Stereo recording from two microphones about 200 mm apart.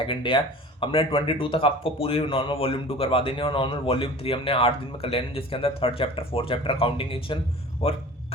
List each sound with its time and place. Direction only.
0.0 s speech: 25° left (ahead or behind)